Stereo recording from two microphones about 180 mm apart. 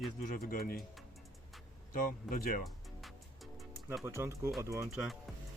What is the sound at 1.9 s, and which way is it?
Speech, 50° left (ahead or behind).